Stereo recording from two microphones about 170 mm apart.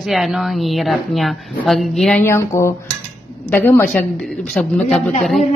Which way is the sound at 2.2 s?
15° left (ahead or behind).